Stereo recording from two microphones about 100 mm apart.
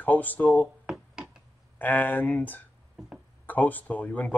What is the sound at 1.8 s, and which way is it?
Speech, 15° left (ahead or behind).